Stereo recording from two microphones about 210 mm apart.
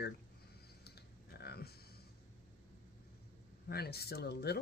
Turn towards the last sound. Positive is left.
turn(degrees=50)  # may be behind; listen again after turning